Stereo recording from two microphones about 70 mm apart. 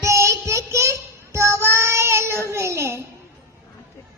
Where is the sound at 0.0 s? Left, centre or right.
Right.